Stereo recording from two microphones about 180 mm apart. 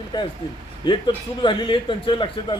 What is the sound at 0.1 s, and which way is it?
A man's voice, 25° left (ahead or behind).